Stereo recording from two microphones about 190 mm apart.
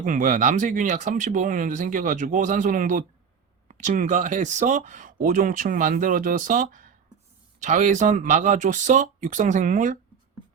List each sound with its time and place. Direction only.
0.0 s speech: 40° right (ahead or behind)